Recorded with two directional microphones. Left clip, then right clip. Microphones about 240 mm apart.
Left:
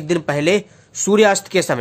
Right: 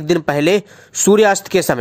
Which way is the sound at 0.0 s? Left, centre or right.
Right.